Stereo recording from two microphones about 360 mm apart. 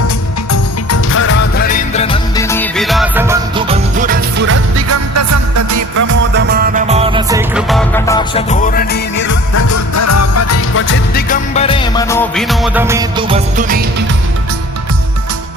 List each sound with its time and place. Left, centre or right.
0.9 s music: left; by 3.8 s centre
3.9 s music: right
5.1 s music: right
6.3 s music: right; by 9.4 s left
9.6 s music: left; by 13.8 s right